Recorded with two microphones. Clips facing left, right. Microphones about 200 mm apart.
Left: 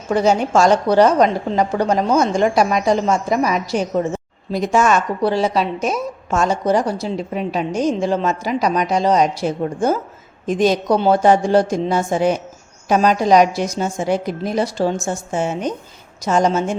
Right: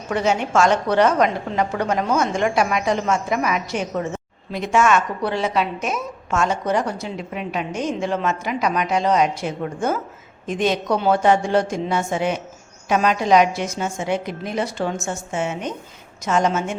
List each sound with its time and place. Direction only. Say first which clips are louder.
0.1 s a woman's voice: left 5 dB; 35° left (ahead or behind)